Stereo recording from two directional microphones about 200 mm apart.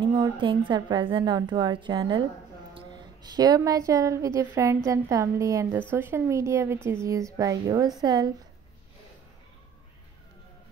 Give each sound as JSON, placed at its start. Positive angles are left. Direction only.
{"t": 0.0, "sound": "a woman's voice", "side_deg": -25}